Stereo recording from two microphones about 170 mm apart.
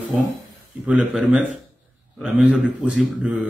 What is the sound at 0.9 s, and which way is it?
A man's voice, 5° right (ahead or behind).